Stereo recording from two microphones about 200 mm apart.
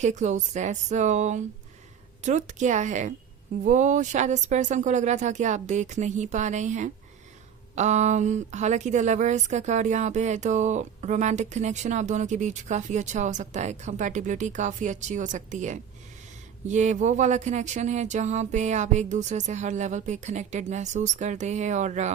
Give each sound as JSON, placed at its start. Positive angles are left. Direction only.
{"t": 0.0, "sound": "a woman's voice", "side_deg": -35}